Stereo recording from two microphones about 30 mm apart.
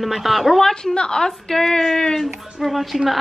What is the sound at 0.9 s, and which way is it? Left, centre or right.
Speech, left.